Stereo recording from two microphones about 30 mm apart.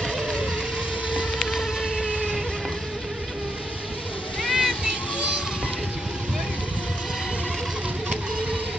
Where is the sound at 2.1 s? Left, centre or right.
Left.